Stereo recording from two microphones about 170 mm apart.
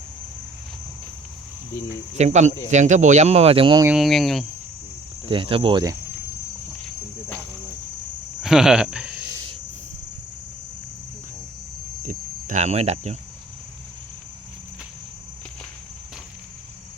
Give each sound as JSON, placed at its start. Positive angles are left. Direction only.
{"t": 2.1, "sound": "speech", "side_deg": -40}
{"t": 3.8, "sound": "speech", "side_deg": 0}
{"t": 5.3, "sound": "speech", "side_deg": -30}
{"t": 6.8, "sound": "insect", "side_deg": 10}
{"t": 8.4, "sound": "cricket", "side_deg": -5}
{"t": 12.0, "sound": "speech", "side_deg": -45}